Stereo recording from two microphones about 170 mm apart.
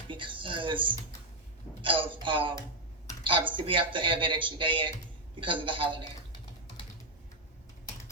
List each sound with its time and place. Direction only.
0.1 s speech: 30° right (ahead or behind)